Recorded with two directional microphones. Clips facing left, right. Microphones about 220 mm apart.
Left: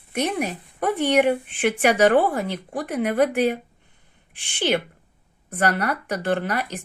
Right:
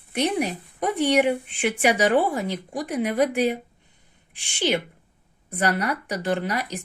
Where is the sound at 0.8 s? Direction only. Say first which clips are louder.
Left 1 dB; 15° right (ahead or behind).